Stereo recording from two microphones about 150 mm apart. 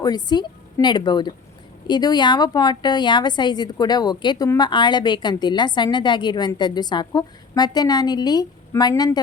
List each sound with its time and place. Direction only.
0.0 s a woman's voice: 30° left (ahead or behind)